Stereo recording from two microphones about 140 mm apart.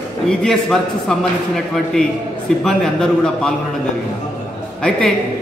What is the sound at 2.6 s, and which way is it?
Speech, 5° left (ahead or behind).